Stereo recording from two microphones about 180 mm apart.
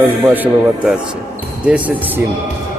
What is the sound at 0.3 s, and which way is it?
Speech, 10° right (ahead or behind).